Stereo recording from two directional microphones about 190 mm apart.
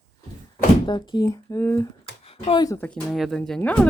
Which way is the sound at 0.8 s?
25° left (ahead or behind).